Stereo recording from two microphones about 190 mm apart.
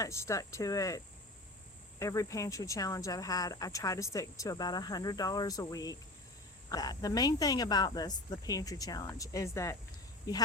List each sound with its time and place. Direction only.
0.0 s speech: 15° left (ahead or behind)